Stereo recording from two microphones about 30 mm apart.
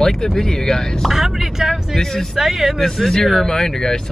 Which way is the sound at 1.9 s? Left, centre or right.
Centre.